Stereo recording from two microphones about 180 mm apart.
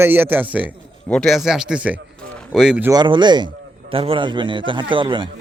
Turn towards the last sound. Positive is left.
turn(degrees=-25)  # may be behind; listen again after turning